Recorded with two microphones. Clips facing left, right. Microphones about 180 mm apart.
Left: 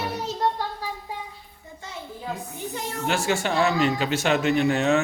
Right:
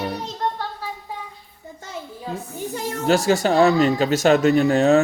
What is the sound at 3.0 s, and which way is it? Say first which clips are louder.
Speech: right 7 dB; 40° right (ahead or behind).